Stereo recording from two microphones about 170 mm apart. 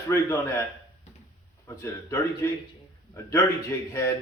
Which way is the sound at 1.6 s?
15° left (ahead or behind).